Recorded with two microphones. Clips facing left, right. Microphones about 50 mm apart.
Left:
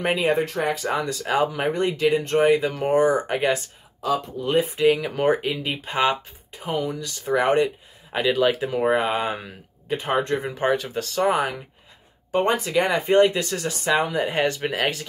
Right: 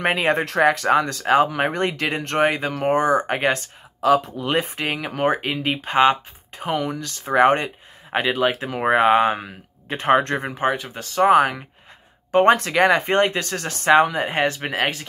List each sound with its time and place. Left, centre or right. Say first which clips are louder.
0.0 s speech: right 1 dB; right
1.2 s speech: right 3 dB; right
1.6 s speech: even; right
4.0 s speech: right 6 dB; right
4.8 s speech: left 5 dB; right
6.6 s speech: right 2 dB; right
7.2 s speech: right 3 dB; right
8.9 s speech: right 7 dB; right
9.8 s speech: right 5 dB; right
10.5 s speech: even; centre
11.1 s speech: right 7 dB; right
12.3 s speech: right 6 dB; right
13.0 s speech: left 2 dB; right
14.3 s speech: right 1 dB; right